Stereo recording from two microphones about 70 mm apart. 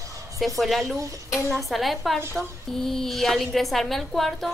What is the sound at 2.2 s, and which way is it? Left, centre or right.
Speech, right.